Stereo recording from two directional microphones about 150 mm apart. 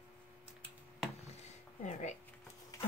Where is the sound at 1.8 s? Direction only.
50° left (ahead or behind).